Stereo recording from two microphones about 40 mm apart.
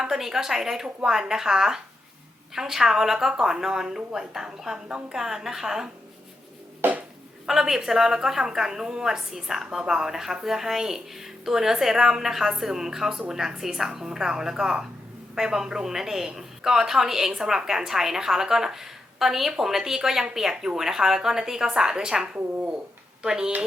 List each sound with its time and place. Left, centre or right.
0.0 s a woman's voice: centre
6.8 s a sound: right
7.4 s a woman's voice: centre